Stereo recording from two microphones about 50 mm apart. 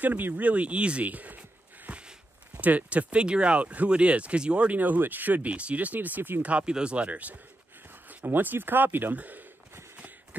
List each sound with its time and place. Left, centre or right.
0.0 s speech: right
1.9 s a sound: right
2.6 s speech: right
6.4 s speech: right
8.3 s speech: right